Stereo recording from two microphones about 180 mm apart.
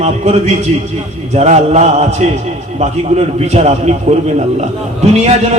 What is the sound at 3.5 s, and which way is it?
Speech, 35° right (ahead or behind).